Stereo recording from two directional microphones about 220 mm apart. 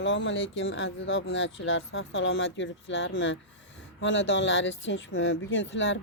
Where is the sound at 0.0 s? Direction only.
55° left (ahead or behind).